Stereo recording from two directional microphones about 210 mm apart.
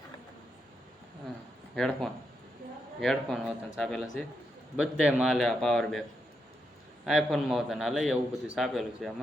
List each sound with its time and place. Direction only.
1.7 s a man's voice: centre (ahead or behind)
7.0 s a man's voice: centre (ahead or behind)